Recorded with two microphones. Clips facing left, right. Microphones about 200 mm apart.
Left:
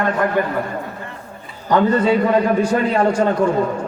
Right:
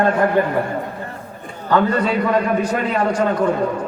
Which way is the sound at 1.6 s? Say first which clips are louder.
Left 2 dB; 20° left (ahead or behind).